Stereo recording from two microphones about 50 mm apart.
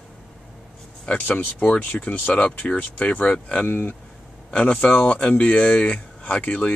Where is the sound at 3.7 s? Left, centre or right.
Left.